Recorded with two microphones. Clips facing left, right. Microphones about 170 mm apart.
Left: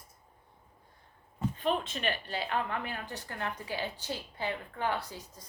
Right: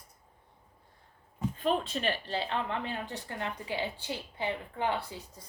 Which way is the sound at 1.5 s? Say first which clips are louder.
Right 3 dB; 40° right (ahead or behind).